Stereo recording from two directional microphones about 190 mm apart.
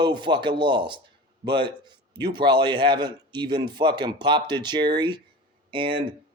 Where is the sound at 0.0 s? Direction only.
25° right (ahead or behind).